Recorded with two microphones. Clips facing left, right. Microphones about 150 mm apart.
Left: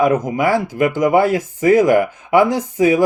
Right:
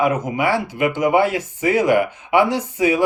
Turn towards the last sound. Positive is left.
turn(degrees=40)  # may be behind; listen again after turning